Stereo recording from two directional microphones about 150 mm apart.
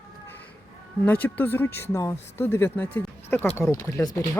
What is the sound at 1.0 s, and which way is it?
Speech, 10° left (ahead or behind).